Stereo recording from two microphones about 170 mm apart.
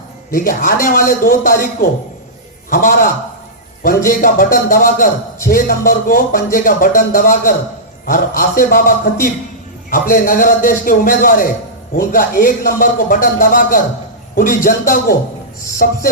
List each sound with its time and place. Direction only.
0.3 s a man's voice: 50° left (ahead or behind)
9.9 s a man's voice: 55° left (ahead or behind)